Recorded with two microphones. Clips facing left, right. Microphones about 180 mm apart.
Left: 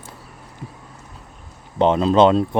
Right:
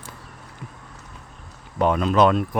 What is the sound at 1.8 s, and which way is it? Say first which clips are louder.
Speech: left 4 dB; 25° left (ahead or behind).